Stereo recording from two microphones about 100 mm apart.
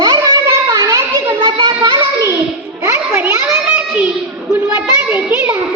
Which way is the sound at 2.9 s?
25° right (ahead or behind).